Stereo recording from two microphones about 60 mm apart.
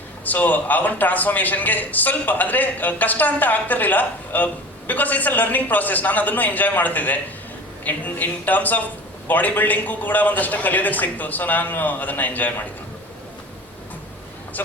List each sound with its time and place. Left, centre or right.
0.3 s a man's voice: left